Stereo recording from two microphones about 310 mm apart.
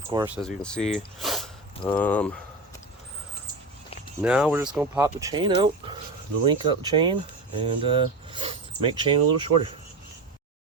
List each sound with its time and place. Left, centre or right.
0.1 s speech: centre
0.4 s speech: centre
4.2 s speech: centre